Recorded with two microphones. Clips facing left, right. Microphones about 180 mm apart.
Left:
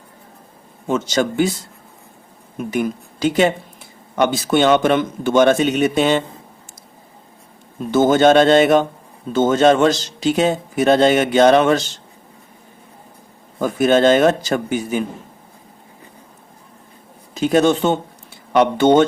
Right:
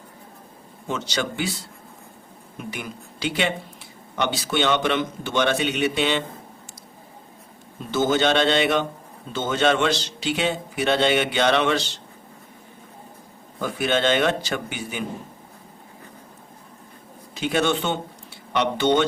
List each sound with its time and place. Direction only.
0.9 s speech: 45° left (ahead or behind)
7.9 s a man's voice: 50° left (ahead or behind)
13.6 s a man's voice: 45° left (ahead or behind)
17.3 s a man's voice: 40° left (ahead or behind)